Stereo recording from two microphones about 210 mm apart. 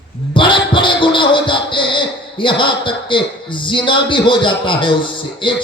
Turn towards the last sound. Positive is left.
turn(degrees=25)  # may be behind; listen again after turning